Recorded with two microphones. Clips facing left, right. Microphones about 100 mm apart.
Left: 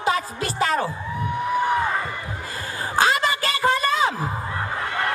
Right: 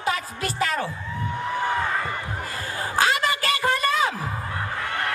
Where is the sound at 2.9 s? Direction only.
30° left (ahead or behind).